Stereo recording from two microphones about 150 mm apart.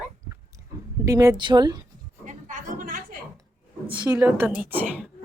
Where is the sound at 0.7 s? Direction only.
25° right (ahead or behind).